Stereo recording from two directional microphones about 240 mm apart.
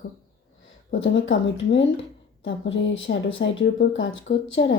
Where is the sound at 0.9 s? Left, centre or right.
Left.